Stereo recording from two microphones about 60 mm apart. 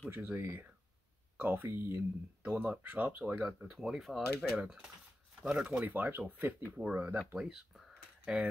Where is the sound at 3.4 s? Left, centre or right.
Centre.